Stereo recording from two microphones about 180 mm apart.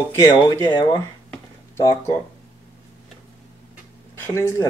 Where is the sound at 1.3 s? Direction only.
15° left (ahead or behind).